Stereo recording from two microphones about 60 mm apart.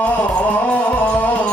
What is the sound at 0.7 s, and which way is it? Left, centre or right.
Music, left.